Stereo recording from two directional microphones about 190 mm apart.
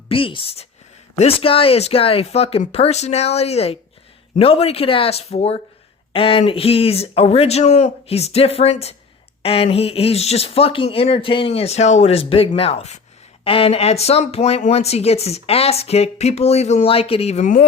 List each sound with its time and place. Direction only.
0.1 s a woman's voice: 30° left (ahead or behind); by 17.7 s 45° left (ahead or behind)